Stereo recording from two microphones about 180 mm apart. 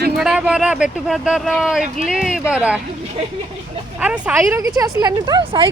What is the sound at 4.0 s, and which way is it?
Speech, 5° right (ahead or behind).